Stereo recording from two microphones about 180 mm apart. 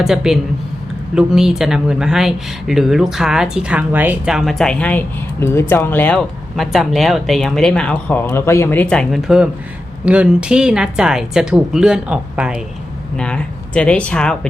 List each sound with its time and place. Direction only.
0.0 s speech: centre (ahead or behind)
13.1 s speech: 5° left (ahead or behind)